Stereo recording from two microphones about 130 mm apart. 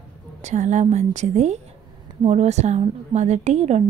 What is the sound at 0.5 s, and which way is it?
A woman's voice, 65° right (ahead or behind).